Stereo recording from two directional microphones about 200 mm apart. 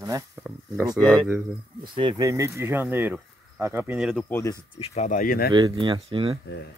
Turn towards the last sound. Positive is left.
turn(degrees=-25)  # may be behind; listen again after turning